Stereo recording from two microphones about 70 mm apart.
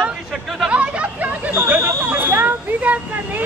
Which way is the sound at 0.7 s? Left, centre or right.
Centre.